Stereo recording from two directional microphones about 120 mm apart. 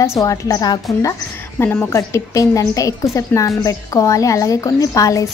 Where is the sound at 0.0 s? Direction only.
25° left (ahead or behind).